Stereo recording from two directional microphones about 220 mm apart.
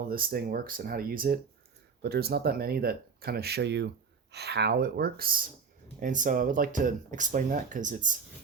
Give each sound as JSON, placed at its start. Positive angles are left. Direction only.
{"t": 0.1, "sound": "speech", "side_deg": -40}